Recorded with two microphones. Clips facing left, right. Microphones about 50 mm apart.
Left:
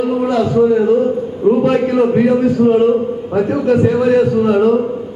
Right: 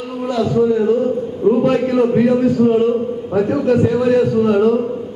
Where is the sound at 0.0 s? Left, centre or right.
Left.